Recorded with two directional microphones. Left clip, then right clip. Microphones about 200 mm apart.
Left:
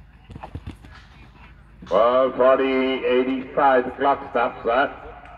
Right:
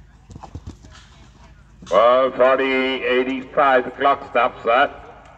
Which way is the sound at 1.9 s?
20° left (ahead or behind).